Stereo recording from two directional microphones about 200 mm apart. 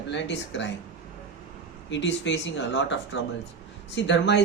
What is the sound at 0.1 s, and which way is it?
Speech, 60° left (ahead or behind).